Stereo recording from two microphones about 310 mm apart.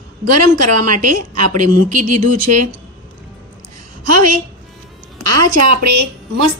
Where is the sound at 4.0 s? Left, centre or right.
Right.